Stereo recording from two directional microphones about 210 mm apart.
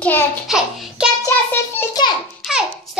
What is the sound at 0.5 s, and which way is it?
Child singing, centre (ahead or behind).